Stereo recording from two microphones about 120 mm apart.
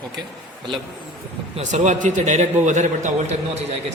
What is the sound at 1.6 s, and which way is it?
Speech, 85° right.